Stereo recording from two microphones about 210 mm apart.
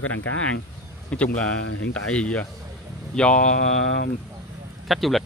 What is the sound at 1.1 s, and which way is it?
Speech, 5° left (ahead or behind).